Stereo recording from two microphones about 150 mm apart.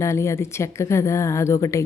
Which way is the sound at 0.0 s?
20° left (ahead or behind).